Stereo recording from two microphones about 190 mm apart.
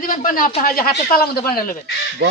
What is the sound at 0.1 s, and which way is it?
Speech, 45° left (ahead or behind).